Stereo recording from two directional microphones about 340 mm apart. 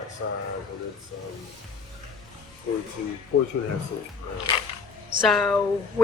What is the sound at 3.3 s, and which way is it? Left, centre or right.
Speech, left.